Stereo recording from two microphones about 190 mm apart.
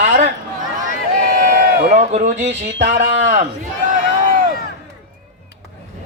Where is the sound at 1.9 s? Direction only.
40° right (ahead or behind).